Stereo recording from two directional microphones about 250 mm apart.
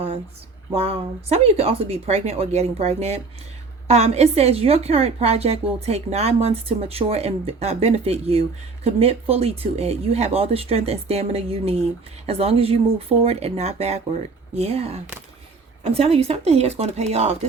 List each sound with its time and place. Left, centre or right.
0.7 s a woman's voice: right